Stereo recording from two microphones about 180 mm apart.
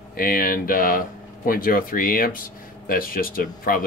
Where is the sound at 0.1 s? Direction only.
55° left (ahead or behind).